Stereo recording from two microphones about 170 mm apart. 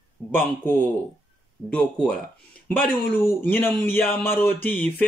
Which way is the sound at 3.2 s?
10° left (ahead or behind).